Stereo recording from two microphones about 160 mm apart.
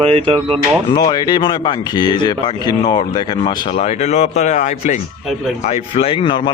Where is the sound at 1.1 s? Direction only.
25° left (ahead or behind).